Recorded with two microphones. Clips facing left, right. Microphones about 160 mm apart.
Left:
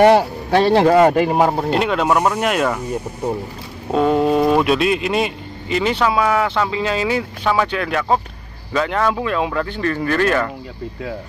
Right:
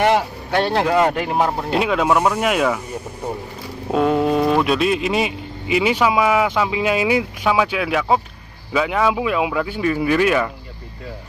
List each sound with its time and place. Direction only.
0.7 s speech: 40° left (ahead or behind)
1.7 s speech: centre (ahead or behind)
3.9 s a man's voice: centre (ahead or behind)